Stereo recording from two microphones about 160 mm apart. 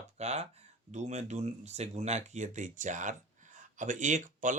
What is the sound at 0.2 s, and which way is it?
Speech, 45° right (ahead or behind).